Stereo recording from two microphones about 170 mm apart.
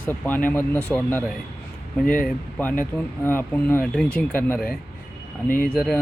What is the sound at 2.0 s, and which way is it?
Speech, 55° left (ahead or behind).